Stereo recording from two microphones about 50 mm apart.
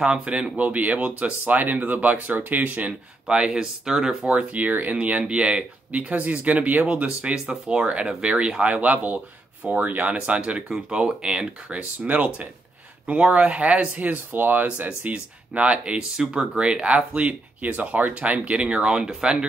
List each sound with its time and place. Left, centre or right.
0.0 s speech: centre
3.3 s speech: centre
4.3 s speech: right
14.1 s speech: right
15.1 s speech: right